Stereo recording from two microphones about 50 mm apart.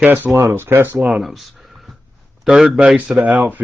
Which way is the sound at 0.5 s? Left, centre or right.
Right.